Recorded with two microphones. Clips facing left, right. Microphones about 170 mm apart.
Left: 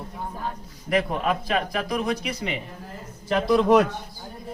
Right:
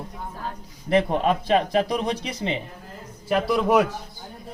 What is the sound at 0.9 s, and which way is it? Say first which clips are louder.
Speech: right 3 dB; 30° right (ahead or behind).